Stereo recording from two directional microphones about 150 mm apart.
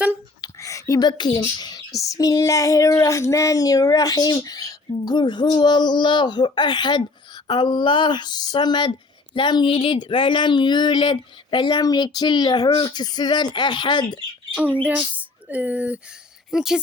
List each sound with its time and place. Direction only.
0.4 s whispering: 20° left (ahead or behind)
2.0 s female singing: 20° left (ahead or behind)
7.4 s speech: 30° left (ahead or behind)
14.5 s speech: 10° right (ahead or behind)